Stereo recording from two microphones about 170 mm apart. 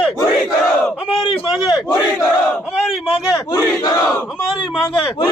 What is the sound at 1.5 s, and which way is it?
Battle cry, centre (ahead or behind).